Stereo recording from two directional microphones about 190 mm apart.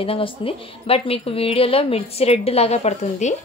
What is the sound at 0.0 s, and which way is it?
A woman's voice, 30° left (ahead or behind).